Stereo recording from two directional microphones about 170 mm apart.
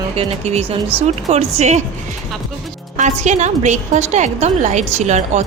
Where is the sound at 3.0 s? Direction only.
45° right (ahead or behind).